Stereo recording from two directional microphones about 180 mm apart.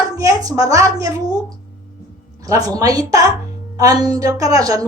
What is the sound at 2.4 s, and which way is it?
A woman's voice, 20° right (ahead or behind).